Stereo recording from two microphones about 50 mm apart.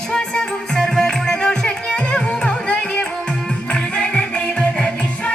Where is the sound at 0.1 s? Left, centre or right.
Centre.